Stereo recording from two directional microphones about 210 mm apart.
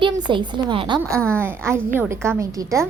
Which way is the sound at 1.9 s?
10° right (ahead or behind).